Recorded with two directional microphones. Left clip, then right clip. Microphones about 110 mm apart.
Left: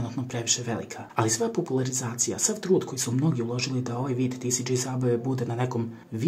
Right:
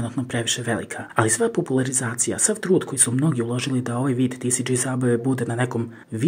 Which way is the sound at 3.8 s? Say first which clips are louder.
Right 5 dB; 40° right (ahead or behind).